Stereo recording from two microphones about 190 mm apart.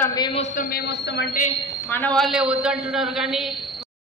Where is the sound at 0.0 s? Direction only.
20° left (ahead or behind).